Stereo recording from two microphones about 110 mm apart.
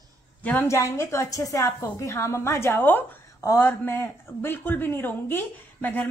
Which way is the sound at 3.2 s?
30° left (ahead or behind).